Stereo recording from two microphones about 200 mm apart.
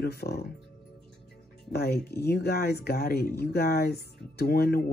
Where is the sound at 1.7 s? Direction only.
55° left (ahead or behind).